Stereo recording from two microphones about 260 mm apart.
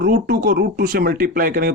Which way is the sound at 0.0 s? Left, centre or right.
Right.